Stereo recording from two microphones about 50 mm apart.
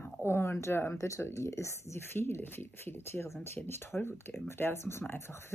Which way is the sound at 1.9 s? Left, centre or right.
Left.